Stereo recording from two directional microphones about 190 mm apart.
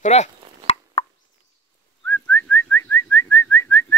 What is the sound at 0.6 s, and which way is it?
Plop, 30° left (ahead or behind).